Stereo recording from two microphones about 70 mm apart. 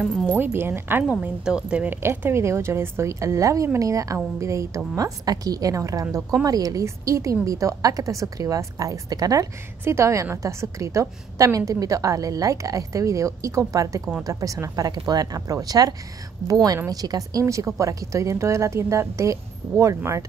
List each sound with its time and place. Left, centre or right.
0.4 s a woman's voice: right
1.4 s speech: centre
1.9 s a woman's voice: right
9.8 s a woman's voice: right
14.9 s a woman's voice: right